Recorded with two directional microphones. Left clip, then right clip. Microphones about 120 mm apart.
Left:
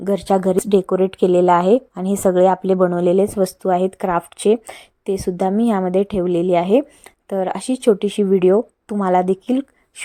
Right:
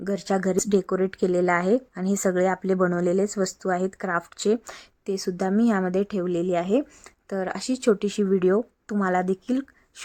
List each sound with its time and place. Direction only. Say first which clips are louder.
0.0 s a woman's voice: left 8 dB; 25° left (ahead or behind)
2.7 s speech: left 7 dB; centre (ahead or behind)
3.0 s a woman's voice: left 8 dB; 15° left (ahead or behind)